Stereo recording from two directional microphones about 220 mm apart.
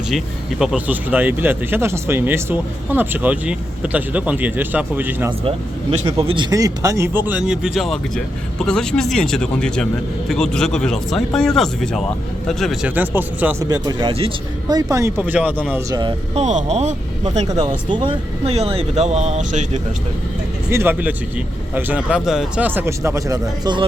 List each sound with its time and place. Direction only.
0.6 s speech: 5° right (ahead or behind)
6.3 s speech: 20° right (ahead or behind)
16.0 s speech: 25° right (ahead or behind)
17.5 s speech: 20° right (ahead or behind)
20.7 s speech: 10° right (ahead or behind)